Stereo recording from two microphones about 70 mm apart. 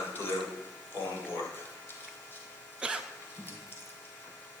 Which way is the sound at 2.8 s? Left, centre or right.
Centre.